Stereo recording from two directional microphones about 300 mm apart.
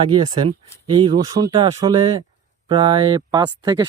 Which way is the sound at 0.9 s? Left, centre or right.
Centre.